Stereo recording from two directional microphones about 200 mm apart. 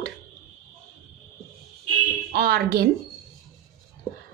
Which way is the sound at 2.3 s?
50° right (ahead or behind).